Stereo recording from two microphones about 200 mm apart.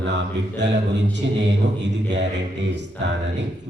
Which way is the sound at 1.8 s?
60° right (ahead or behind).